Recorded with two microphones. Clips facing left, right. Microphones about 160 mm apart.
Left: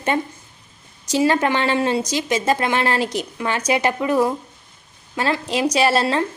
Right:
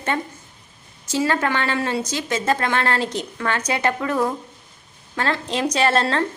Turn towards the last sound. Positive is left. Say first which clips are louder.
# left 1 dB
turn(degrees=10)  # may be behind; listen again after turning